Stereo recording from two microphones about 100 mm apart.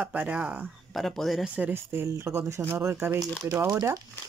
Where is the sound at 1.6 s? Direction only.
20° right (ahead or behind).